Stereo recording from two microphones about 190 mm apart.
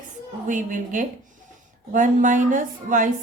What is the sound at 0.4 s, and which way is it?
Speech, 45° right (ahead or behind).